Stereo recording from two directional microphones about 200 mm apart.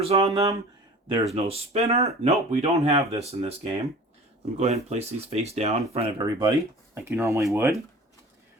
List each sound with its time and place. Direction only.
0.0 s speech: 30° right (ahead or behind)
0.3 s speech: 15° right (ahead or behind)
1.4 s speech: 30° right (ahead or behind)
6.2 s speech: 20° right (ahead or behind)